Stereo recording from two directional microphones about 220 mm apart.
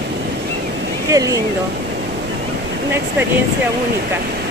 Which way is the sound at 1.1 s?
15° right (ahead or behind).